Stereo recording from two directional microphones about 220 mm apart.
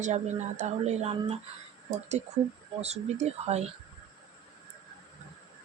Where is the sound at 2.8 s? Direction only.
30° right (ahead or behind).